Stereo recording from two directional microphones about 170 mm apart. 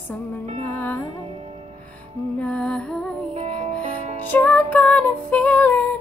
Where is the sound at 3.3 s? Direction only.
40° right (ahead or behind).